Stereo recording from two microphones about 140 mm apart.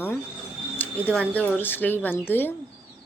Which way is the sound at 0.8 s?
10° left (ahead or behind).